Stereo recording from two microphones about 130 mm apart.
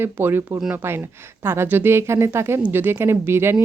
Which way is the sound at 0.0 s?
15° right (ahead or behind).